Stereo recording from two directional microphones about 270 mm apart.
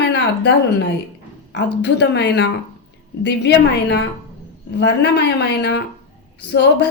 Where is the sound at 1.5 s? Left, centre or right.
Left.